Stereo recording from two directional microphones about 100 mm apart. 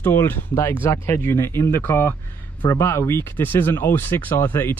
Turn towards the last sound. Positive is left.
turn(degrees=25)  # may be behind; listen again after turning